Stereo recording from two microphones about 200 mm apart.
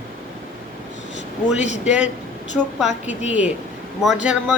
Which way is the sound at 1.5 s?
35° left (ahead or behind).